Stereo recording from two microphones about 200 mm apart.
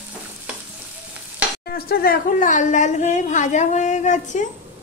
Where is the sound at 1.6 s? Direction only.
50° left (ahead or behind).